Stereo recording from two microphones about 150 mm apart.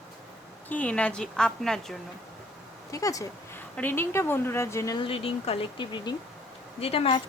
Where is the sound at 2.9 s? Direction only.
20° left (ahead or behind).